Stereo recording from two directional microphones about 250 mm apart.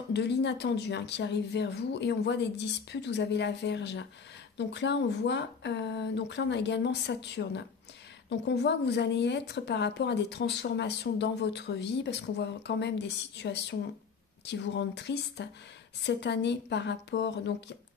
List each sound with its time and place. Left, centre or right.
0.1 s a woman's voice: left